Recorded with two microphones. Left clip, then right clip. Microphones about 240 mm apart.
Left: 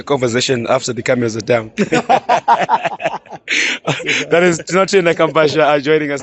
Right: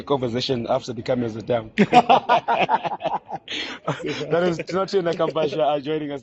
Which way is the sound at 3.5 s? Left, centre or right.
Left.